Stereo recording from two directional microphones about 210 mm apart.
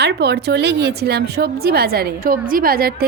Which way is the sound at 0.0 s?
50° right (ahead or behind).